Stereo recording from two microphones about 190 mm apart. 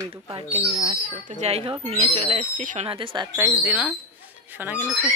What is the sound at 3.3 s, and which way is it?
Speech, 10° right (ahead or behind).